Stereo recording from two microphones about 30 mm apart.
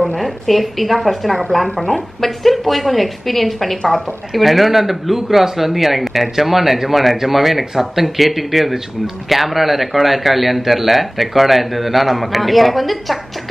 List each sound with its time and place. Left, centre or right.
0.2 s speech: centre